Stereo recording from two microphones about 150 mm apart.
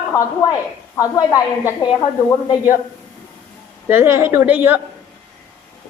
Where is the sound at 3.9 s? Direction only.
15° right (ahead or behind).